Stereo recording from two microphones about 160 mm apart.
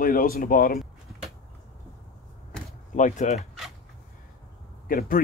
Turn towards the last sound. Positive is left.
turn(degrees=60)  # may be behind; listen again after turning